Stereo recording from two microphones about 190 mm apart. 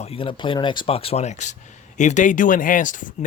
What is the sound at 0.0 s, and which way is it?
Speech, 30° left (ahead or behind).